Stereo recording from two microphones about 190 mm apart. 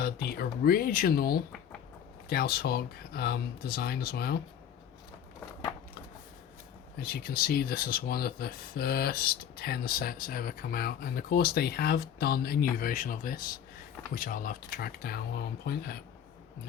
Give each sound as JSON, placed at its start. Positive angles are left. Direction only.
{"t": 0.0, "sound": "speech", "side_deg": 55}
{"t": 7.0, "sound": "speech", "side_deg": 50}